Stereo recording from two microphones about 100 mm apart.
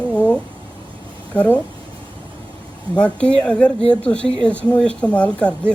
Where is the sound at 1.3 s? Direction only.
15° left (ahead or behind).